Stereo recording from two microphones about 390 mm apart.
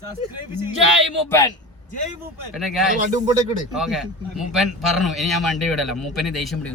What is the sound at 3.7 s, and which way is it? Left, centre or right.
A man's voice, centre.